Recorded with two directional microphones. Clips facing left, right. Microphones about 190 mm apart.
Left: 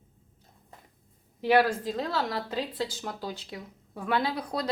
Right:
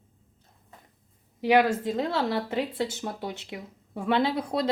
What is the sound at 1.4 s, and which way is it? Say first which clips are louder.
A woman's voice: right 2 dB; 15° right (ahead or behind).